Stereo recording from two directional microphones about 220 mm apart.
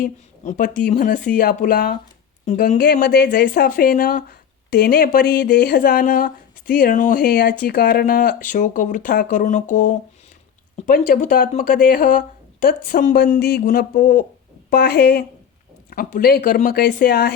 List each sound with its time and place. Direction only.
0.0 s speech: 35° left (ahead or behind)